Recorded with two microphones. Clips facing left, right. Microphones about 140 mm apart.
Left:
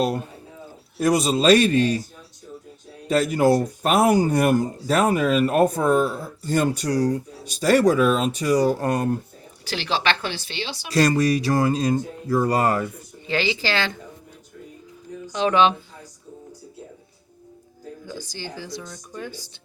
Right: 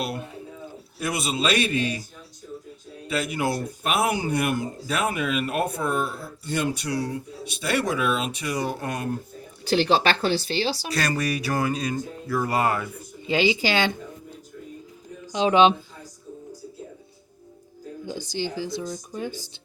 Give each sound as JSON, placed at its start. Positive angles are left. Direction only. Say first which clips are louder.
{"t": 0.9, "sound": "speech", "louder": "left 8 dB", "side_deg": 40}
{"t": 3.1, "sound": "speech", "louder": "left 8 dB", "side_deg": 40}
{"t": 9.6, "sound": "speech", "louder": "right 4 dB", "side_deg": -30}
{"t": 10.9, "sound": "speech", "louder": "left 11 dB", "side_deg": 30}
{"t": 13.2, "sound": "speech", "louder": "right 2 dB", "side_deg": -15}
{"t": 15.3, "sound": "speech", "louder": "right 1 dB", "side_deg": -15}
{"t": 18.3, "sound": "speech", "louder": "right 6 dB", "side_deg": -15}